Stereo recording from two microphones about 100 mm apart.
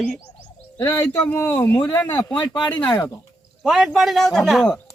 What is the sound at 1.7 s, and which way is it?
Speech, 45° left (ahead or behind).